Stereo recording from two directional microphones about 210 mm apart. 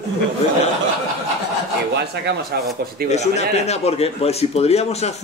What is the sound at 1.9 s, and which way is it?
Speech, 50° right (ahead or behind).